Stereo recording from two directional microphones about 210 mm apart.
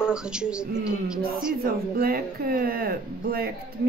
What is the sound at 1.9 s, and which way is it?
Speech, 45° right (ahead or behind).